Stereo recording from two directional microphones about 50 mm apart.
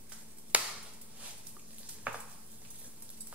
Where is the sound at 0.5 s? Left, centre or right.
Right.